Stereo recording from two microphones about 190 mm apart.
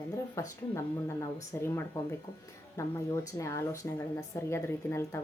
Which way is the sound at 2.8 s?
15° left (ahead or behind).